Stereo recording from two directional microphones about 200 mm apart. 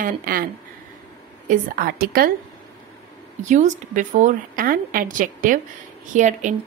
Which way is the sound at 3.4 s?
40° right (ahead or behind).